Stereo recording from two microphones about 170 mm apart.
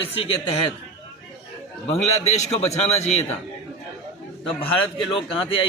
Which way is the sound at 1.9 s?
40° left (ahead or behind).